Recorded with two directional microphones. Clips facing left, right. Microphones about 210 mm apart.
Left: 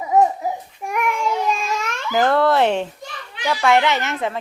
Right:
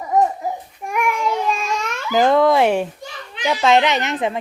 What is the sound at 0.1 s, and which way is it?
Babbling, 10° left (ahead or behind).